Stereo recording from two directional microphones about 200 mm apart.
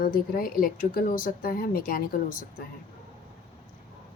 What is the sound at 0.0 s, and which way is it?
Speech, 45° left (ahead or behind).